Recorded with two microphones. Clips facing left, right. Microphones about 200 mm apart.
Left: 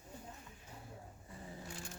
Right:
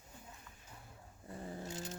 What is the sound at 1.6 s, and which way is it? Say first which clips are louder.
Vehicle: right 5 dB; 20° right (ahead or behind).